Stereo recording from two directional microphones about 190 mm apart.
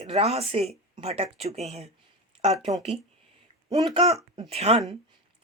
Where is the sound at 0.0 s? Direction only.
35° right (ahead or behind).